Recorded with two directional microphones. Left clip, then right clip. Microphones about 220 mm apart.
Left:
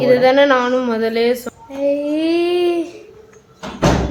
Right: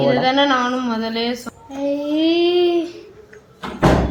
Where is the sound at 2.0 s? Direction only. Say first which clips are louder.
Even; 30° left (ahead or behind).